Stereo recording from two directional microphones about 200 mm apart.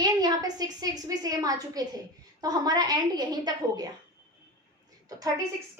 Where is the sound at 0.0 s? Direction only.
20° right (ahead or behind).